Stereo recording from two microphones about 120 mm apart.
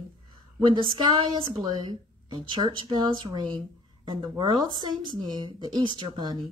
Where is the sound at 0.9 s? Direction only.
35° right (ahead or behind).